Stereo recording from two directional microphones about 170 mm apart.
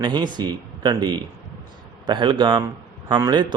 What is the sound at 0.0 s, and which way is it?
Speech, 25° right (ahead or behind).